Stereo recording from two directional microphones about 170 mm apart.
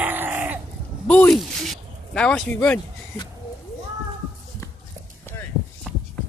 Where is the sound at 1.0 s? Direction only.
5° left (ahead or behind).